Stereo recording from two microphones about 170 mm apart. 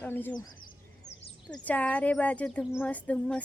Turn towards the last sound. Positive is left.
turn(degrees=5)  # may be behind; listen again after turning